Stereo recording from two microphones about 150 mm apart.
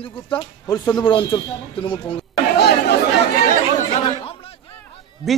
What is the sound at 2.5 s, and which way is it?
Chatter, 90° left.